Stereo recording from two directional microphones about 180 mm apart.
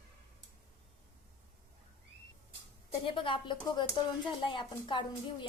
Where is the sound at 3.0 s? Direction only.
30° left (ahead or behind).